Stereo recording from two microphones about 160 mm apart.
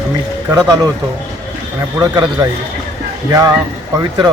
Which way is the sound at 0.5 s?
25° right (ahead or behind).